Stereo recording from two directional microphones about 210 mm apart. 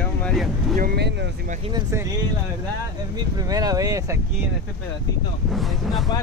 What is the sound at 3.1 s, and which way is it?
Speech, 20° right (ahead or behind).